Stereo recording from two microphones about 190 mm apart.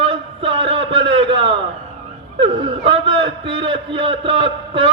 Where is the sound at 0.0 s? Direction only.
30° right (ahead or behind).